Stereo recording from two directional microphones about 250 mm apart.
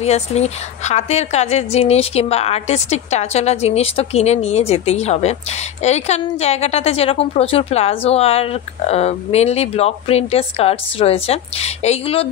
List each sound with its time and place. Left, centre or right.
0.0 s a woman's voice: left